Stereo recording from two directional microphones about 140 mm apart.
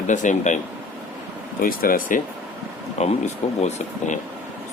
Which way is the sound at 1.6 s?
85° left.